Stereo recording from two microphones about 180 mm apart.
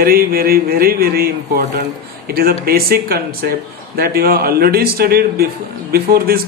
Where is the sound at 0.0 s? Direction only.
55° right (ahead or behind).